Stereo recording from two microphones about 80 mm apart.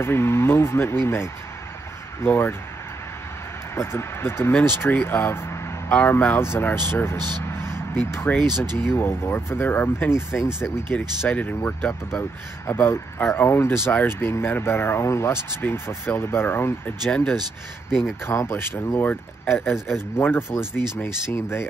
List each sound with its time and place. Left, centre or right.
0.0 s speech: left
3.7 s speech: left
7.2 s speech: right
7.4 s vehicle: left
8.1 s speech: left
10.9 s speech: centre
17.1 s speech: centre
17.8 s speech: centre
18.2 s speech: left